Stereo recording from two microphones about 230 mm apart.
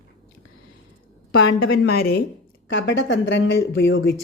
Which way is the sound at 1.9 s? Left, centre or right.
Left.